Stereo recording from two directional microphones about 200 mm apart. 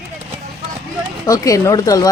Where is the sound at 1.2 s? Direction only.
15° left (ahead or behind).